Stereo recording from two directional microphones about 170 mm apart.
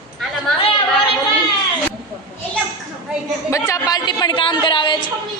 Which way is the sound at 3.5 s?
20° left (ahead or behind).